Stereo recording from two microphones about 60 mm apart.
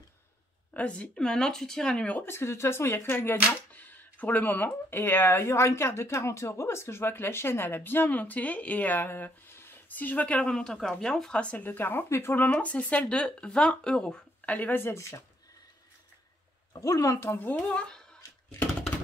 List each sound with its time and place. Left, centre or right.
0.7 s a woman's voice: left
1.1 s speech: centre
2.2 s speech: left
3.7 s speech: left
9.8 s speech: left
10.5 s speech: centre
11.6 s speech: left
12.5 s speech: left
14.4 s speech: left
15.0 s speech: left
17.0 s speech: left
17.6 s speech: centre